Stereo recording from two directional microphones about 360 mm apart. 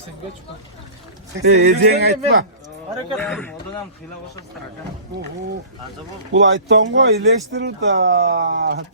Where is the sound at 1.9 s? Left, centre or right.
Right.